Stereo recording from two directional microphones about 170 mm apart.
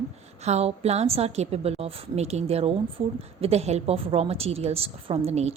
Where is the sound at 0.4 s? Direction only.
40° right (ahead or behind).